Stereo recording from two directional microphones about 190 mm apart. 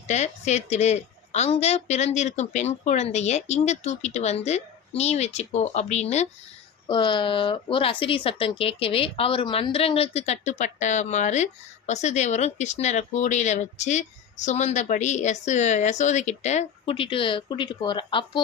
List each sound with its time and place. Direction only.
0.1 s speech: 35° left (ahead or behind)